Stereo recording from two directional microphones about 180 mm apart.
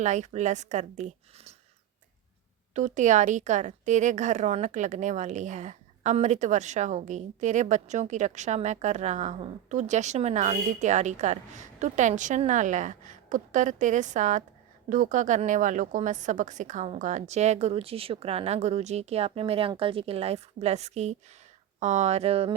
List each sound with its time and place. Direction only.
0.0 s a woman's voice: 40° right (ahead or behind)
2.7 s a woman's voice: 45° right (ahead or behind)